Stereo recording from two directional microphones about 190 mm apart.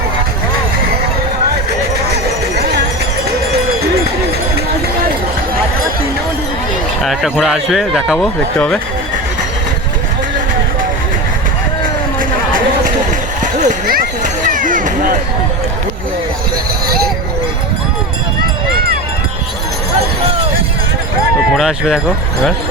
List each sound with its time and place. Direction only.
7.0 s speech: centre (ahead or behind)
8.5 s speech: 5° left (ahead or behind)
13.4 s a sound: 40° right (ahead or behind)
21.5 s speech: centre (ahead or behind)